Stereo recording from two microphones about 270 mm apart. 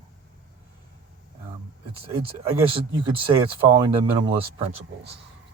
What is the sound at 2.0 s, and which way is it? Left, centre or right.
Speech, right.